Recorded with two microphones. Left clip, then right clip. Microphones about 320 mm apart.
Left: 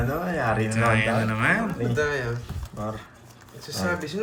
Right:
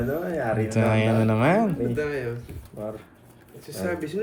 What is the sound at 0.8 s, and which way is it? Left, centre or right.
Speech, centre.